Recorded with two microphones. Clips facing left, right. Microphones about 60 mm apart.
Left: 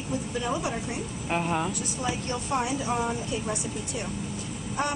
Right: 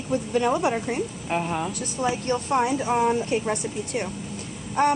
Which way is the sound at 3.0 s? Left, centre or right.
Right.